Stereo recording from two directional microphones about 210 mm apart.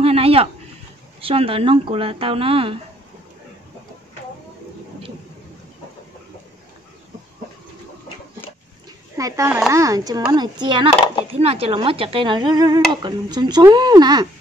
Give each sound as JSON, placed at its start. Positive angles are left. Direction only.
{"t": 0.0, "sound": "a sound", "side_deg": -30}
{"t": 1.2, "sound": "speech", "side_deg": -25}
{"t": 9.1, "sound": "speech", "side_deg": -15}